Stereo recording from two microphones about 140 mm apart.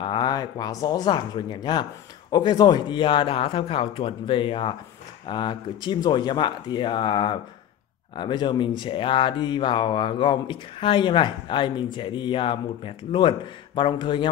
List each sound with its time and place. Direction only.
0.0 s speech: 35° left (ahead or behind)